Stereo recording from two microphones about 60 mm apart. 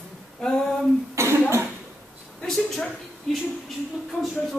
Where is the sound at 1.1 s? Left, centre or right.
Right.